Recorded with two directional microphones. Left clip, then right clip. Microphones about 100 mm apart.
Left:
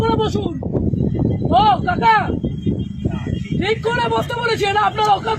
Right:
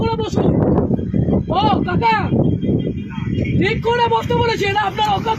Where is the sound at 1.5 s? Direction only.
55° left (ahead or behind).